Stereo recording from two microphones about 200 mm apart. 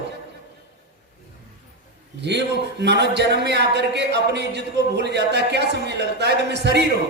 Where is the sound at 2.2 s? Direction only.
60° right (ahead or behind).